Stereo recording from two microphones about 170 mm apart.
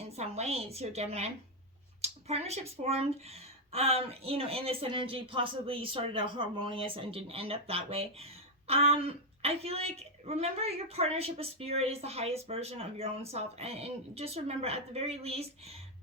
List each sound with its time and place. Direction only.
0.2 s speech: 40° right (ahead or behind)